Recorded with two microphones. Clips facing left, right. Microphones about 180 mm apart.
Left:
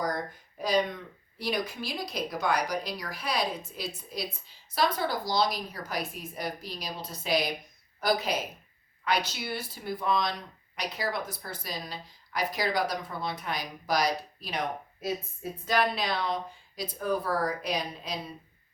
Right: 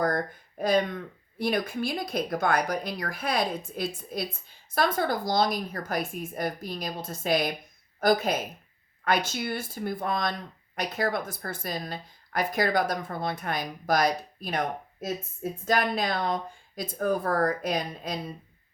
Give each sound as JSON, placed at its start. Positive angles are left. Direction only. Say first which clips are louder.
{"t": 0.0, "sound": "speech", "louder": "right 5 dB", "side_deg": -55}